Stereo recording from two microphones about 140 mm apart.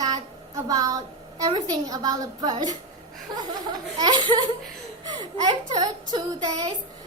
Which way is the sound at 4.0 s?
35° right (ahead or behind).